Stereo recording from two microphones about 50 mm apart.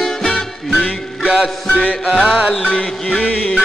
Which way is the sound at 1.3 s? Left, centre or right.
Centre.